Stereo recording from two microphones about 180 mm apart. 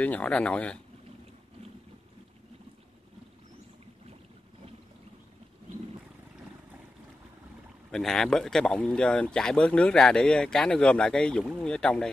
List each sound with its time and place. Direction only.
0.0 s speech: 10° left (ahead or behind)
7.9 s speech: centre (ahead or behind)